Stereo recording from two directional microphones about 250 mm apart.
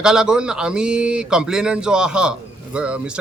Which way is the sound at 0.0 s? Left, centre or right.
Centre.